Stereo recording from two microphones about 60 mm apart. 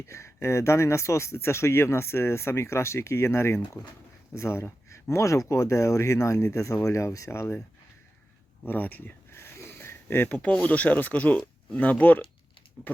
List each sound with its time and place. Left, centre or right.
0.1 s speech: left
7.3 s speech: left
8.6 s a sound: left
10.2 s speech: left